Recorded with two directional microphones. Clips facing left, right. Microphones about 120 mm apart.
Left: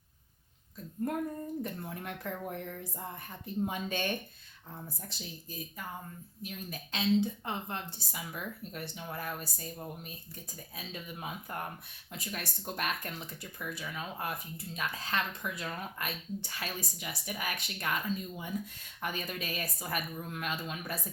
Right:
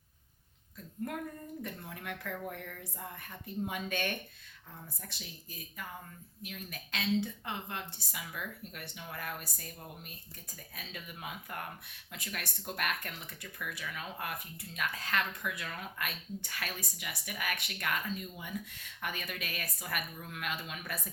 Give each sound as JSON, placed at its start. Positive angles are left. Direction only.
{"t": 1.6, "sound": "speech", "side_deg": 35}
{"t": 10.8, "sound": "speech", "side_deg": 25}